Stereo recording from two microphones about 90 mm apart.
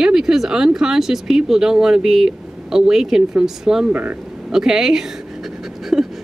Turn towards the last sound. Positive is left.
turn(degrees=0)  # may be behind; listen again after turning